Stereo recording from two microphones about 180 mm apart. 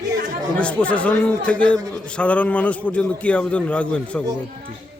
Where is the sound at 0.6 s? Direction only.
5° left (ahead or behind).